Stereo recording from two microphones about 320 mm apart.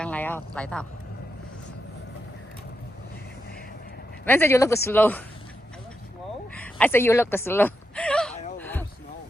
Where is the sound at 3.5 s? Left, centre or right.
Left.